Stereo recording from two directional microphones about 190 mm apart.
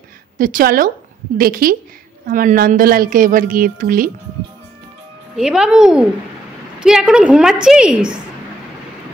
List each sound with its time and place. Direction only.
0.4 s a woman's voice: 45° right (ahead or behind)
5.3 s speech: 5° right (ahead or behind)